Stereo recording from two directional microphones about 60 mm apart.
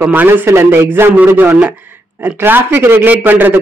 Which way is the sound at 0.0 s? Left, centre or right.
Right.